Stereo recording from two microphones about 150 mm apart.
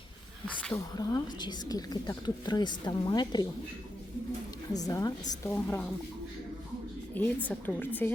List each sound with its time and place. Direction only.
0.9 s a woman's voice: 25° left (ahead or behind)
4.7 s a woman's voice: 25° left (ahead or behind)
5.5 s a woman's voice: 10° left (ahead or behind)
7.1 s a woman's voice: 10° left (ahead or behind)